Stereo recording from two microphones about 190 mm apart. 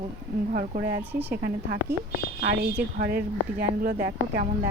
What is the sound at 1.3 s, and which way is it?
Speech, 50° right (ahead or behind).